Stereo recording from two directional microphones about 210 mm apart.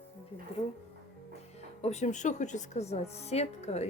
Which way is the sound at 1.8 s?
35° left (ahead or behind).